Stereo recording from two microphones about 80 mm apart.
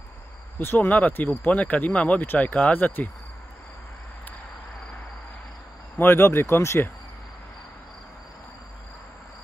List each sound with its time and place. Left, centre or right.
0.6 s speech: left
5.9 s speech: left